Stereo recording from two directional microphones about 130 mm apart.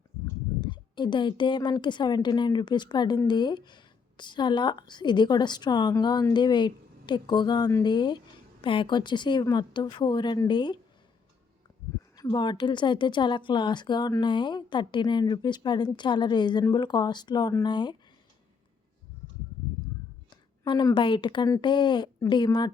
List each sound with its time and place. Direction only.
0.6 s a woman's voice: 35° left (ahead or behind)
12.1 s a woman's voice: 30° left (ahead or behind)
20.3 s a sound: 35° left (ahead or behind)
20.9 s a woman's voice: 40° left (ahead or behind)